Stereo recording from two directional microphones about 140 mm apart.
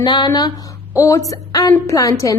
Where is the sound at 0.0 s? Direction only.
30° left (ahead or behind).